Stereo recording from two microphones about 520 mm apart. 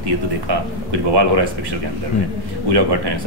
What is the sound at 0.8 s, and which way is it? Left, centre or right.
Speech, right.